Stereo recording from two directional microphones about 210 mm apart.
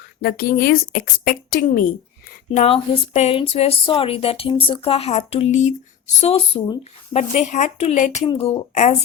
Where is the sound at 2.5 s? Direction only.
30° left (ahead or behind).